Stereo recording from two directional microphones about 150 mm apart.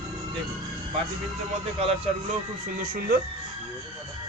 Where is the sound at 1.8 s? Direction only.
40° right (ahead or behind).